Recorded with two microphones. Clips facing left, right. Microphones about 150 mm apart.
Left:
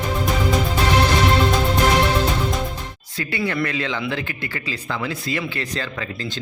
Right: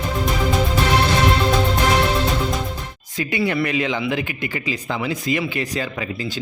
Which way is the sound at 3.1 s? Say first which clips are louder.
Right 3 dB; 15° right (ahead or behind).